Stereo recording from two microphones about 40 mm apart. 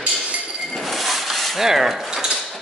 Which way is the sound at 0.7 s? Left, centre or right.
Centre.